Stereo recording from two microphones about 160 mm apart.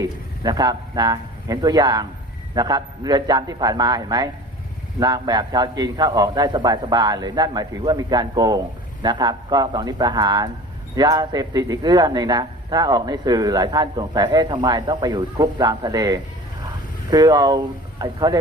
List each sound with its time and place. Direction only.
0.0 s a man's voice: 25° right (ahead or behind)